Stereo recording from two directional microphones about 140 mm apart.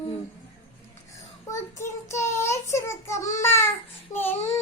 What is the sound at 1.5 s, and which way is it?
Child singing, 20° left (ahead or behind).